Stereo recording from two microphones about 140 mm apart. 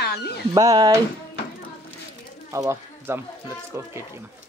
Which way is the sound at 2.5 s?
20° right (ahead or behind).